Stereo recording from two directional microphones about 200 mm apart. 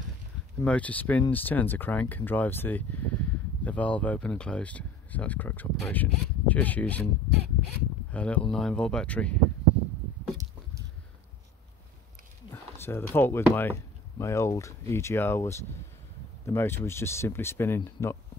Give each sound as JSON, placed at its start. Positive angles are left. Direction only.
{"t": 0.6, "sound": "speech", "side_deg": 5}
{"t": 8.1, "sound": "speech", "side_deg": 5}
{"t": 12.4, "sound": "speech", "side_deg": 10}